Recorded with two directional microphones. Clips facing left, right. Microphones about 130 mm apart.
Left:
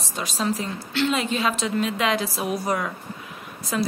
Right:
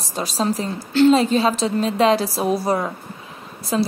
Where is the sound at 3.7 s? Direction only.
30° right (ahead or behind).